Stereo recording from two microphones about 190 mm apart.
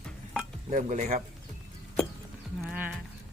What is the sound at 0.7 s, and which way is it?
Speech, 40° right (ahead or behind).